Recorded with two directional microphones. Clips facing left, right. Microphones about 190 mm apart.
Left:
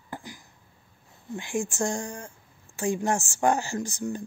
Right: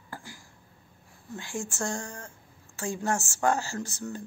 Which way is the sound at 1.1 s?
15° left (ahead or behind).